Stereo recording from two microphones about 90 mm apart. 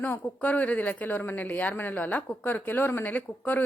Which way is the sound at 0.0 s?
15° left (ahead or behind).